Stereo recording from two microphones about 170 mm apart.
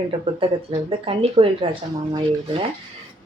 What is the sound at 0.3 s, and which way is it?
Speech, 35° right (ahead or behind).